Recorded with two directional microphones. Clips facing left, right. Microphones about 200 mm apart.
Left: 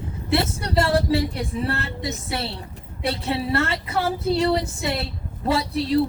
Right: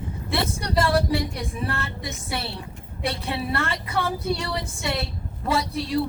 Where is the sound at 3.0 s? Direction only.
25° left (ahead or behind).